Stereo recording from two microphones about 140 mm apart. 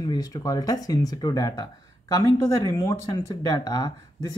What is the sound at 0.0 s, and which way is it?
Speech, 30° left (ahead or behind).